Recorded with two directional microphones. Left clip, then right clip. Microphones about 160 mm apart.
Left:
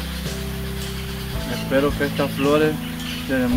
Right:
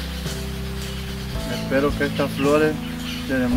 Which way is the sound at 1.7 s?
5° right (ahead or behind).